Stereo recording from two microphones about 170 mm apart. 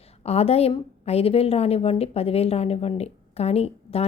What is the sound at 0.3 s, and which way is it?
A woman's voice, 35° left (ahead or behind).